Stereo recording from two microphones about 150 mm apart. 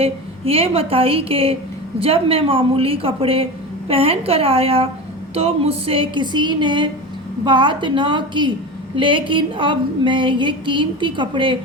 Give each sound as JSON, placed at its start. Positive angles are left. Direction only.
{"t": 0.0, "sound": "a woman's voice", "side_deg": -40}